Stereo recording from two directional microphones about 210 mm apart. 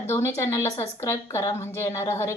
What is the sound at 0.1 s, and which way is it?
A woman's voice, 15° left (ahead or behind).